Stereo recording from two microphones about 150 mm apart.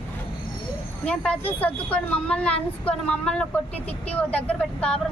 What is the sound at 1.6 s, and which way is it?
Speech, 10° left (ahead or behind).